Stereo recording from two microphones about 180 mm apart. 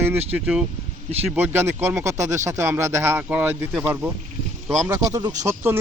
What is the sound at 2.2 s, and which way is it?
Speech, 40° right (ahead or behind).